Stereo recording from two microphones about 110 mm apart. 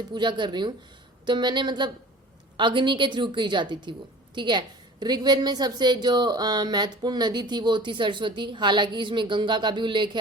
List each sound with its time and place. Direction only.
0.1 s a woman's voice: 45° right (ahead or behind)